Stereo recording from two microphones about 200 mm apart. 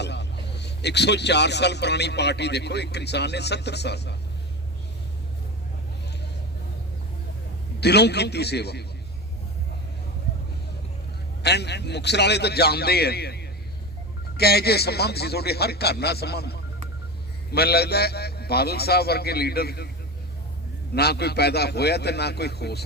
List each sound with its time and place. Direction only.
0.0 s a man's voice: 60° left (ahead or behind)
7.8 s a man's voice: 55° left (ahead or behind)
11.4 s a man's voice: 55° left (ahead or behind)
20.9 s a man's voice: 55° left (ahead or behind)